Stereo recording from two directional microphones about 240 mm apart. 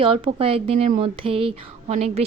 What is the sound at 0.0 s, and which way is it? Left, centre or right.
Speech, right.